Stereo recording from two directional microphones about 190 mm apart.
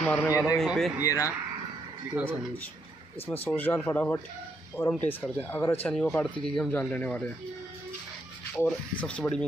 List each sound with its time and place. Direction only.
0.0 s a man's voice: 10° left (ahead or behind)
1.0 s speech: 15° left (ahead or behind)
3.3 s speech: 10° left (ahead or behind)
8.5 s speech: 5° left (ahead or behind)